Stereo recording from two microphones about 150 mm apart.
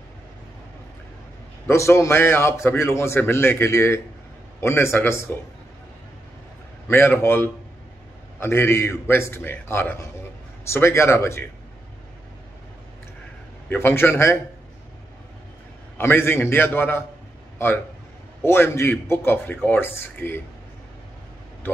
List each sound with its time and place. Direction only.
1.7 s a man's voice: 20° left (ahead or behind)
6.9 s a man's voice: 15° left (ahead or behind)
13.7 s a man's voice: 15° left (ahead or behind)
16.0 s a man's voice: 15° left (ahead or behind)
18.4 s a man's voice: 15° left (ahead or behind)